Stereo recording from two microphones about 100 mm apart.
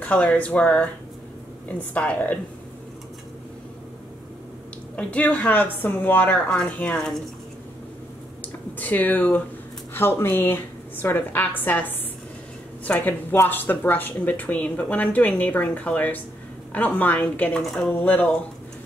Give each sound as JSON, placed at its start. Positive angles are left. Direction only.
{"t": 0.0, "sound": "speech", "side_deg": 15}
{"t": 4.9, "sound": "speech", "side_deg": 15}
{"t": 8.4, "sound": "a woman's voice", "side_deg": 15}